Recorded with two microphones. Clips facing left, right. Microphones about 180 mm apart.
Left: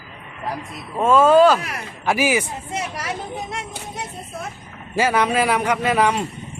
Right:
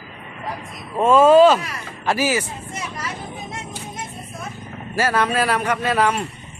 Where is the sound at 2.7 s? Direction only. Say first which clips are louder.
Left 4 dB; 70° left (ahead or behind).